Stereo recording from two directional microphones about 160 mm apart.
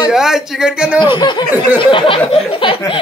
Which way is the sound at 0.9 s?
30° left (ahead or behind).